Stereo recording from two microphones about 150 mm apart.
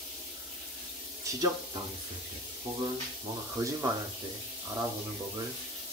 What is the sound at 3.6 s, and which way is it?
Speech, 20° right (ahead or behind).